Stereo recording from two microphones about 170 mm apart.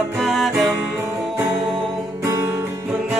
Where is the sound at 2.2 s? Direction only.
15° right (ahead or behind).